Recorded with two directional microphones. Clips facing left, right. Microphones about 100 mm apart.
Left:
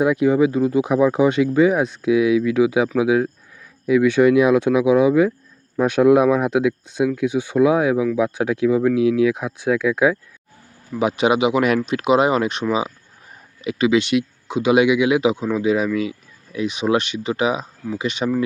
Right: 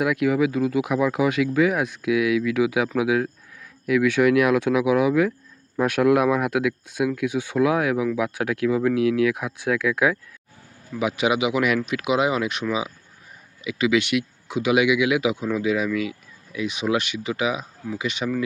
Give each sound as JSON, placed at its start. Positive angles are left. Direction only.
{"t": 0.0, "sound": "speech", "side_deg": 30}
{"t": 13.7, "sound": "speech", "side_deg": 30}